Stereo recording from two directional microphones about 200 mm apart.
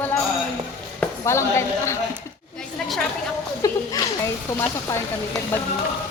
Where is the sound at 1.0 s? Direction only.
15° left (ahead or behind).